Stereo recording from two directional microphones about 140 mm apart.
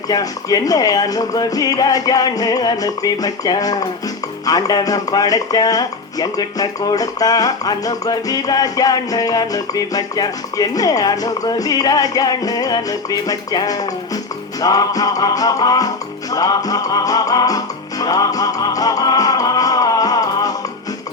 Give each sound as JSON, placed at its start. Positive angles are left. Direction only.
{"t": 0.1, "sound": "speech", "side_deg": 25}
{"t": 18.0, "sound": "music", "side_deg": 25}